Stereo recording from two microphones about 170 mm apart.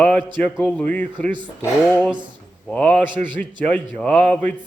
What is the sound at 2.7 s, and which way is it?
Speech, 5° left (ahead or behind).